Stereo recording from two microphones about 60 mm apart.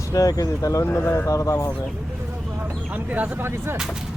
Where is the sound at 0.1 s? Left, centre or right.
Left.